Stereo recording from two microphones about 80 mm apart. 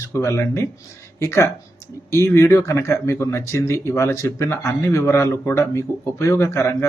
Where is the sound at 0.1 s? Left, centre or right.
Left.